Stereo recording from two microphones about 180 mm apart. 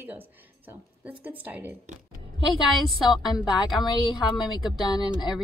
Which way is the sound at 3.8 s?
25° left (ahead or behind).